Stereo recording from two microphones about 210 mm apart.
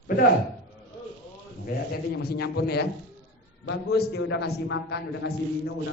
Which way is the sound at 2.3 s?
50° left (ahead or behind).